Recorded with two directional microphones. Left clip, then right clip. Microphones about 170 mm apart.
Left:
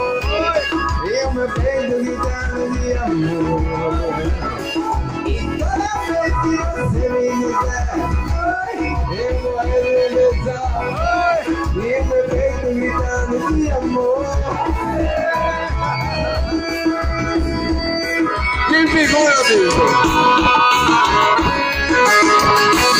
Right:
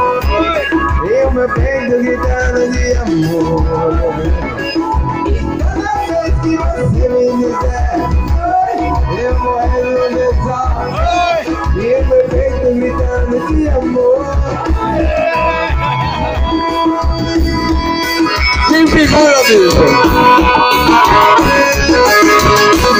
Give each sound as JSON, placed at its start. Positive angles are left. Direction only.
{"t": 18.1, "sound": "music", "side_deg": -35}
{"t": 18.7, "sound": "music", "side_deg": -50}
{"t": 22.1, "sound": "music", "side_deg": -60}